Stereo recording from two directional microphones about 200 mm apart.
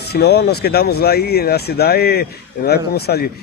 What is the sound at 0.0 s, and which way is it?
Speech, 55° left (ahead or behind).